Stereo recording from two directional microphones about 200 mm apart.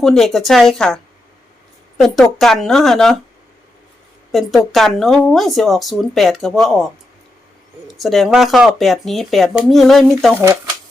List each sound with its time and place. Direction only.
0.0 s speech: centre (ahead or behind)
2.0 s speech: centre (ahead or behind)
4.3 s speech: centre (ahead or behind)
10.3 s speech: 10° right (ahead or behind)